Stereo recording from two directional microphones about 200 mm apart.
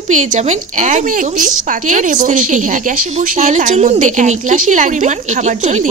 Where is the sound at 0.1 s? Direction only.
35° right (ahead or behind).